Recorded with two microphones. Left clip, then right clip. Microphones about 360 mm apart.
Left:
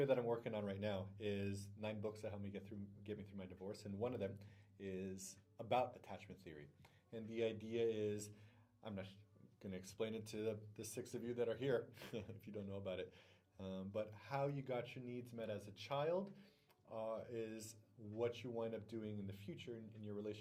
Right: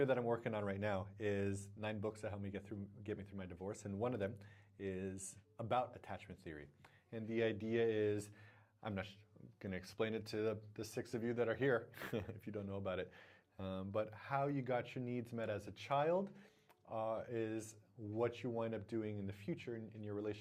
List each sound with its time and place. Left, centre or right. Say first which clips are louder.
0.0 s speech: right 2 dB; right
7.1 s speech: right 4 dB; right
8.8 s speech: right 6 dB; right
9.6 s speech: right 4 dB; right